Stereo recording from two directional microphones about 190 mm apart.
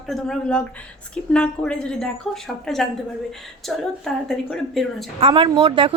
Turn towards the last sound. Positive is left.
turn(degrees=-30)  # may be behind; listen again after turning